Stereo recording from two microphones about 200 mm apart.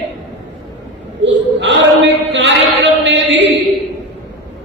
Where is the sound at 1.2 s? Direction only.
65° right (ahead or behind).